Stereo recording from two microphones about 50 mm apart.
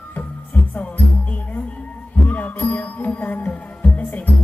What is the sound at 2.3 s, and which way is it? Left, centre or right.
Music, left.